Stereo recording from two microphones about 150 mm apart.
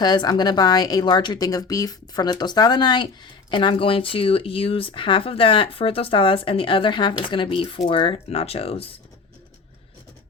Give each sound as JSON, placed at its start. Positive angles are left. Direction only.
{"t": 0.0, "sound": "speech", "side_deg": 25}